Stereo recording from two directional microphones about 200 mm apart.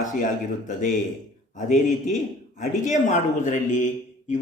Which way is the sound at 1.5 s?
40° left (ahead or behind).